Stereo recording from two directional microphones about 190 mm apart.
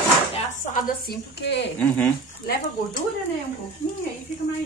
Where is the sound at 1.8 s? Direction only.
5° left (ahead or behind).